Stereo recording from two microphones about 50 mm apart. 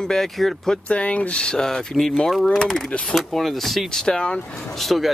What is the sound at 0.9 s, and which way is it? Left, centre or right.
Speech, left.